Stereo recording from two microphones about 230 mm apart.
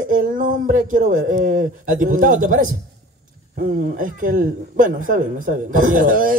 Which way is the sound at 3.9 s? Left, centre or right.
Right.